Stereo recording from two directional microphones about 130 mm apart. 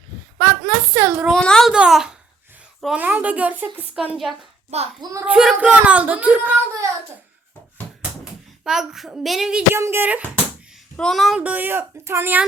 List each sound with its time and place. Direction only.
0.6 s a sound: 10° right (ahead or behind)
1.4 s speech: 5° left (ahead or behind)
1.7 s speech: 5° right (ahead or behind)
4.7 s a child's voice: 55° right (ahead or behind)
5.2 s speech: 5° right (ahead or behind)
8.2 s speech: 5° right (ahead or behind)
9.7 s speech: 20° right (ahead or behind)
10.9 s speech: 5° left (ahead or behind)
11.3 s speech: 10° right (ahead or behind)